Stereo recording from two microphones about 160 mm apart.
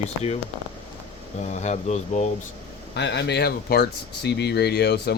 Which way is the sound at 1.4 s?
45° left (ahead or behind).